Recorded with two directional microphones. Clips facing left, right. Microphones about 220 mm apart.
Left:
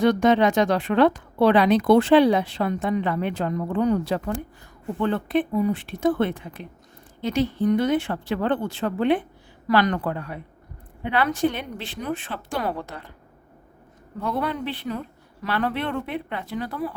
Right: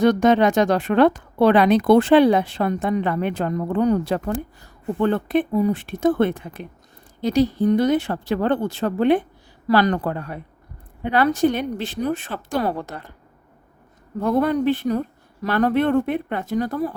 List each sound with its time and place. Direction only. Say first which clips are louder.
0.0 s a woman's voice: right 2 dB; 45° right (ahead or behind)
14.2 s a woman's voice: right 8 dB; 45° right (ahead or behind)